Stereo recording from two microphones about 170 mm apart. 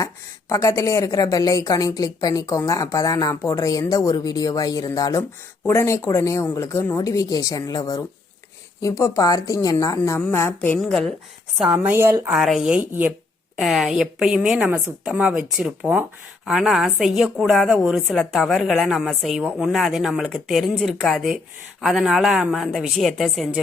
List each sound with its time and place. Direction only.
0.0 s a woman's voice: 20° left (ahead or behind); by 11.8 s centre (ahead or behind)
11.8 s a woman's voice: 15° right (ahead or behind)
12.3 s a woman's voice: centre (ahead or behind)